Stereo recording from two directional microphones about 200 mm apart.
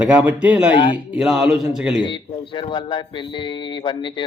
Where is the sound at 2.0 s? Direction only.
25° left (ahead or behind).